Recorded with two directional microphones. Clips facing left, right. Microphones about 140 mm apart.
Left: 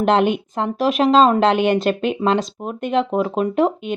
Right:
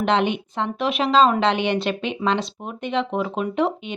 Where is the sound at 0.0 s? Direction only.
45° left (ahead or behind).